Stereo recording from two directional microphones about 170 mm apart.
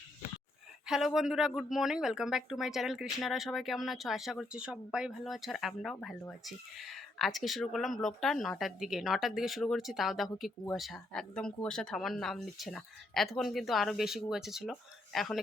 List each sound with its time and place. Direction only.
0.9 s a woman's voice: 5° right (ahead or behind)